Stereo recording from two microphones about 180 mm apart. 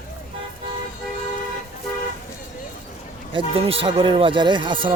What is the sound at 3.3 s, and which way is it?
Speech, 30° right (ahead or behind).